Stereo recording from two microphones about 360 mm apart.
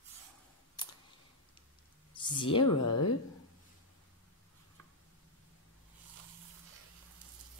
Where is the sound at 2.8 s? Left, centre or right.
Left.